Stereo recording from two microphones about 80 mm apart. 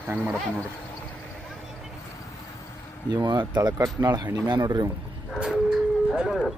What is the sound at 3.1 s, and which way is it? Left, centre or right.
Speech, right.